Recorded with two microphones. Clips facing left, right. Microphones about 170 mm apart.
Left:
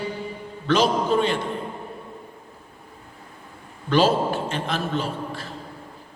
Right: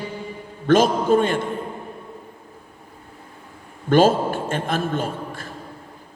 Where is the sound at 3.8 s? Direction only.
50° right (ahead or behind).